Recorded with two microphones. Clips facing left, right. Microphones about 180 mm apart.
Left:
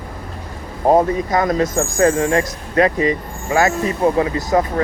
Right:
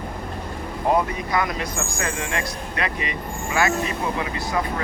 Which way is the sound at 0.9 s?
45° left (ahead or behind).